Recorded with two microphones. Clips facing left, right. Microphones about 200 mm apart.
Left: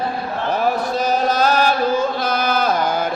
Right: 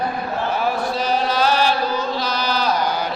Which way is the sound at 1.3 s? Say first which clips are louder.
Left 1 dB; 45° left (ahead or behind).